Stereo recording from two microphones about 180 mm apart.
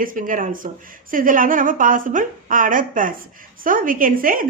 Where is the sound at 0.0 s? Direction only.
50° right (ahead or behind).